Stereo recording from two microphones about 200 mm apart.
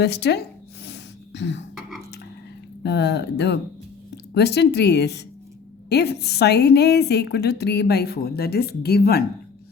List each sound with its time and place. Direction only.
0.0 s a woman's voice: 55° left (ahead or behind)
0.9 s throat clearing: 60° left (ahead or behind)
2.8 s a woman's voice: 55° left (ahead or behind)